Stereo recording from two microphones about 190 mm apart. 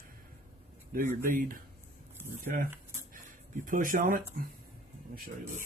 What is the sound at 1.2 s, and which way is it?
Speech, 45° right (ahead or behind).